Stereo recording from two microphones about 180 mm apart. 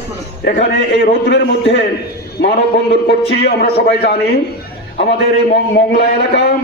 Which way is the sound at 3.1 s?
65° left (ahead or behind).